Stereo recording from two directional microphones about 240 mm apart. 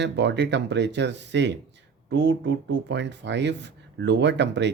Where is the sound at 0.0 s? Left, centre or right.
Right.